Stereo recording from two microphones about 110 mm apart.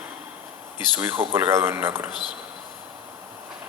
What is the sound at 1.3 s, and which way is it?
Speech, 20° right (ahead or behind).